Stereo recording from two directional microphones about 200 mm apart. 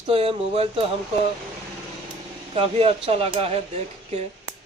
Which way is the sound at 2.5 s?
30° right (ahead or behind).